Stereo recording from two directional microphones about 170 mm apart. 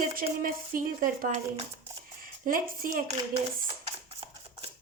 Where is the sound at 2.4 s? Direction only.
55° right (ahead or behind).